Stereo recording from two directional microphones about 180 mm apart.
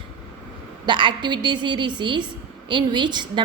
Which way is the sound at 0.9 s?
25° right (ahead or behind).